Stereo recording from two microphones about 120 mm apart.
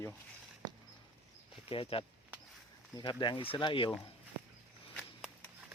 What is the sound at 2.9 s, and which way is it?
Speech, 35° left (ahead or behind).